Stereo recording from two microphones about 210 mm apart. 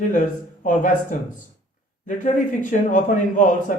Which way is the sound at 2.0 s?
35° left (ahead or behind).